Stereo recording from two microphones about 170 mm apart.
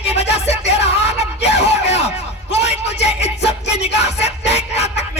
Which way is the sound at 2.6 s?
40° left (ahead or behind).